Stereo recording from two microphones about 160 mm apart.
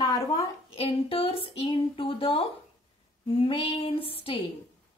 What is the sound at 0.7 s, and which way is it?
Speech, 35° left (ahead or behind).